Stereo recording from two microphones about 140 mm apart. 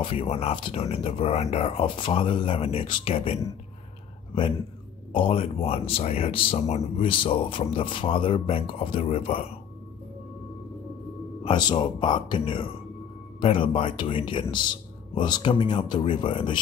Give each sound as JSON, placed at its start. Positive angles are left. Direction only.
{"t": 0.0, "sound": "speech", "side_deg": 40}
{"t": 5.1, "sound": "speech", "side_deg": 40}
{"t": 11.4, "sound": "speech", "side_deg": 35}